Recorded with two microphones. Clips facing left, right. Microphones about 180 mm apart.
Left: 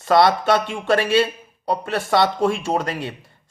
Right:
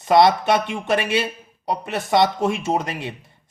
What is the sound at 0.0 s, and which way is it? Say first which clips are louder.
A man's voice: right 1 dB; 20° right (ahead or behind).